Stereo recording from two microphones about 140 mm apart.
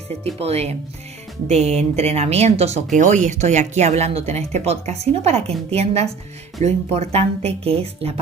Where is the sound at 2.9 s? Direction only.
65° right (ahead or behind).